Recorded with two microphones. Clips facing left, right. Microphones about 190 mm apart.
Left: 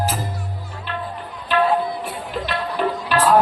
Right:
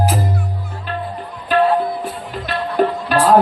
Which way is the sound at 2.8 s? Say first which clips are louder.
Right 6 dB; 40° right (ahead or behind).